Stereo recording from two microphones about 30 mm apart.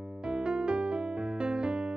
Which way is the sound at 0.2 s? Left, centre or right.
Right.